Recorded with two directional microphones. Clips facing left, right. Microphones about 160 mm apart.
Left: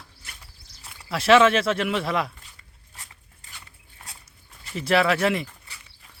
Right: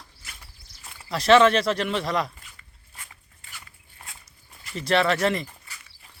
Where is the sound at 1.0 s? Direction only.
5° left (ahead or behind).